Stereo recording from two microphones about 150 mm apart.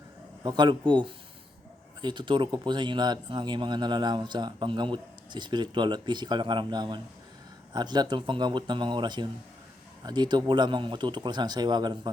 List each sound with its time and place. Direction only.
0.4 s speech: 30° right (ahead or behind)